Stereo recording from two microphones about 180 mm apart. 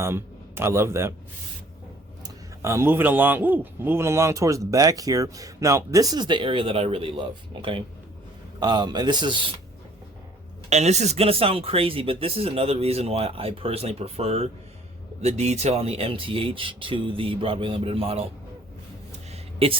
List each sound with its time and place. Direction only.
0.0 s a man's voice: 15° right (ahead or behind)
2.2 s a man's voice: 15° right (ahead or behind)
10.7 s a man's voice: 40° right (ahead or behind)
19.3 s a sound: 30° right (ahead or behind)